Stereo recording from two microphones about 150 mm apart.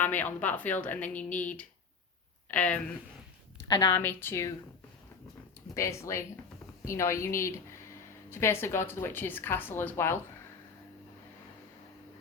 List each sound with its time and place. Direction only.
0.0 s a woman's voice: 10° left (ahead or behind)
3.7 s speech: 30° left (ahead or behind)
3.9 s a woman's voice: 15° left (ahead or behind)
5.7 s a woman's voice: 20° left (ahead or behind)